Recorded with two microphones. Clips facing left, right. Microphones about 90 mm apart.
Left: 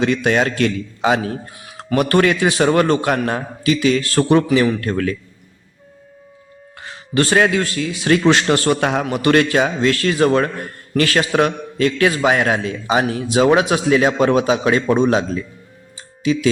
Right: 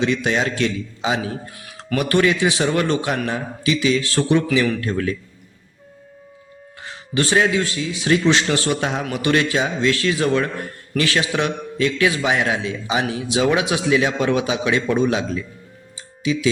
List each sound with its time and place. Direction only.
0.0 s a man's voice: 50° left (ahead or behind)
4.8 s a man's voice: 60° left (ahead or behind)
7.1 s a man's voice: 50° left (ahead or behind)
16.0 s music: 45° left (ahead or behind)